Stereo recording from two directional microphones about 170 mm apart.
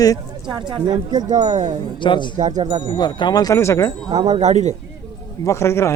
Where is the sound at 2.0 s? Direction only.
25° left (ahead or behind).